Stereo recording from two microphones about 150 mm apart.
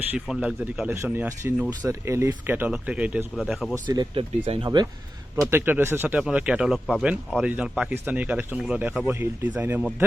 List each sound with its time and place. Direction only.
0.3 s speech: 5° right (ahead or behind)
1.8 s speech: 20° right (ahead or behind); by 3.8 s centre (ahead or behind)
3.8 s speech: 30° right (ahead or behind)
5.4 s speech: 15° right (ahead or behind)